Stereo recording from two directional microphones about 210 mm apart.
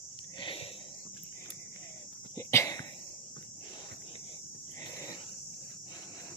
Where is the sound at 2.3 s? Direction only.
15° left (ahead or behind).